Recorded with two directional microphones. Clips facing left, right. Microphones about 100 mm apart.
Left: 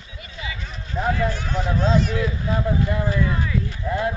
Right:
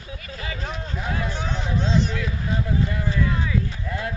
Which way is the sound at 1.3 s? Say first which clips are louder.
Left 1 dB; 20° right (ahead or behind).